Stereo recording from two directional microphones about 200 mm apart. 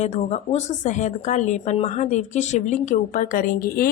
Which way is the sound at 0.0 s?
35° left (ahead or behind).